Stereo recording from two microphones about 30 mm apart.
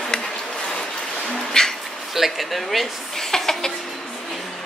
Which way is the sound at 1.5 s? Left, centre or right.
Centre.